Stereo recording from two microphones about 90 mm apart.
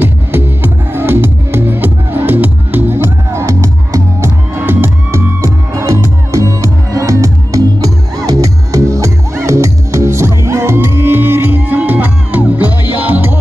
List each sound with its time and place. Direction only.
0.0 s music: 25° right (ahead or behind)
4.6 s music: 25° right (ahead or behind)